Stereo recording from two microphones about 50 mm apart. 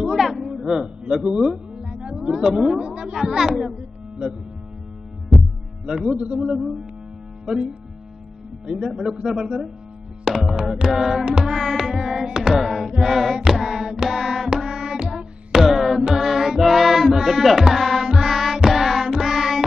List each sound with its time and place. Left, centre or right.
0.1 s music: centre
2.8 s a man's voice: centre
5.9 s a man's voice: centre
6.1 s a man's voice: right
6.4 s a man's voice: centre
8.6 s a man's voice: centre
10.2 s music: centre
10.7 s a man's voice: centre
11.2 s music: centre